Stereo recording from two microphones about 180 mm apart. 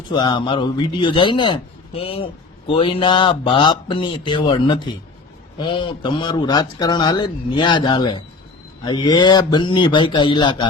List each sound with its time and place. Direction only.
0.1 s a man's voice: 25° left (ahead or behind)